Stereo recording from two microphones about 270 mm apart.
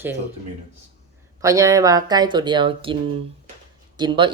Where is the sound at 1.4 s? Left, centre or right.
Centre.